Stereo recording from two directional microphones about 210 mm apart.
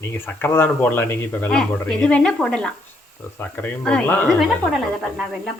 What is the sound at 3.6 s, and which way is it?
Stir, 5° left (ahead or behind).